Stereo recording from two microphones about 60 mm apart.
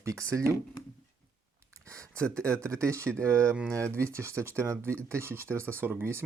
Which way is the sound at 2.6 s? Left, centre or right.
Right.